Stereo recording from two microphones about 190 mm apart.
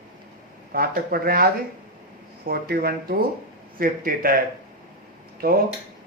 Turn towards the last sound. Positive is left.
turn(degrees=-50)  # may be behind; listen again after turning